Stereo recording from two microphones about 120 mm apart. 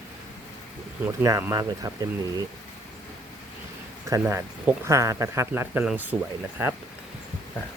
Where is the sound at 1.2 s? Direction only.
25° right (ahead or behind).